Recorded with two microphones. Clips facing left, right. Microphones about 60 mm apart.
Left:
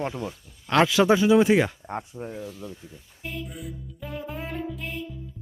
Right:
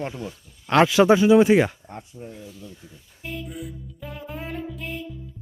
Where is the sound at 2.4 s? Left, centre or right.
Left.